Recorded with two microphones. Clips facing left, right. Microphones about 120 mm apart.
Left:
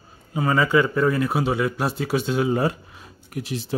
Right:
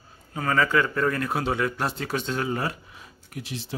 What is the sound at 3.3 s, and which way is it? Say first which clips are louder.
Speech: left 6 dB; 45° left (ahead or behind).